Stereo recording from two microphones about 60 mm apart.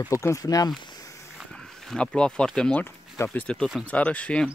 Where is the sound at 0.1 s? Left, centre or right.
Left.